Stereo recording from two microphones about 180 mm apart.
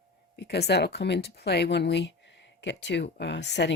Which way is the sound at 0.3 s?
65° left (ahead or behind).